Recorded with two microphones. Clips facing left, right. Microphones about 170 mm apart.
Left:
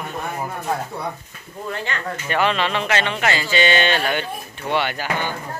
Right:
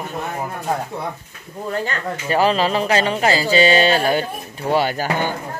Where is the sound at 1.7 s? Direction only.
40° right (ahead or behind).